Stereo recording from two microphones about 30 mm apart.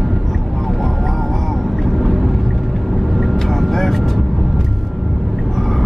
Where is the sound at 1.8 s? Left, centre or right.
Centre.